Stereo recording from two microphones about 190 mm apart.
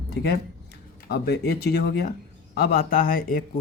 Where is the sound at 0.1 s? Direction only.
55° left (ahead or behind).